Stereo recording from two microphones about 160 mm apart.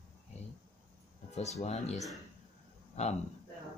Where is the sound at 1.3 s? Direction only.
45° left (ahead or behind).